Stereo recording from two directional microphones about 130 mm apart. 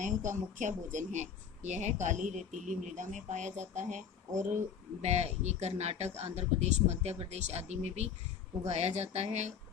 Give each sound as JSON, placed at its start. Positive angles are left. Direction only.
{"t": 0.0, "sound": "a woman's voice", "side_deg": -75}
{"t": 5.0, "sound": "speech", "side_deg": -55}